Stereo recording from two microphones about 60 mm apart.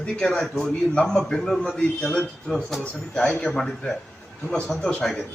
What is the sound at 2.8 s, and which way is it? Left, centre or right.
Speech, centre.